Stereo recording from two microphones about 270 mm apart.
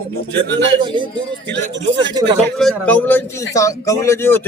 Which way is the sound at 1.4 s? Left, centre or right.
Right.